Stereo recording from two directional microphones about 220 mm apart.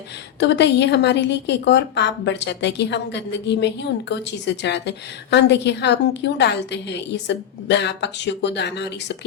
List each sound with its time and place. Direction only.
0.3 s a woman's voice: 55° left (ahead or behind)